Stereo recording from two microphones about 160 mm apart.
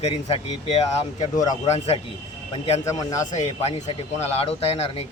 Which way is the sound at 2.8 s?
20° left (ahead or behind).